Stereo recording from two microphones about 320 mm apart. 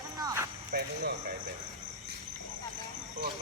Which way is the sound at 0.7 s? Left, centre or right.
Right.